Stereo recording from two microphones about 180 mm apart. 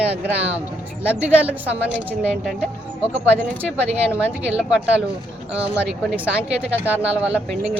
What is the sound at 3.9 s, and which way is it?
A woman's voice, 5° right (ahead or behind).